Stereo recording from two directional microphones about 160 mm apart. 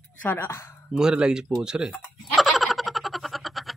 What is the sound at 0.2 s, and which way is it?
Speech, 10° left (ahead or behind).